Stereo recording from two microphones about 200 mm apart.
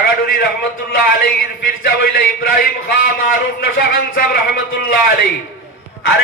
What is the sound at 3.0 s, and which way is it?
A man's voice, 45° left (ahead or behind).